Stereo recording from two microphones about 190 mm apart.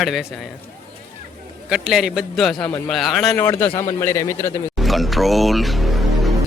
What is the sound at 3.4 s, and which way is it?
A man's voice, 10° left (ahead or behind).